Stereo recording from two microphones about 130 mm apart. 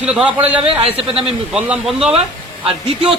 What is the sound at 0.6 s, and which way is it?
Speech, 45° right (ahead or behind).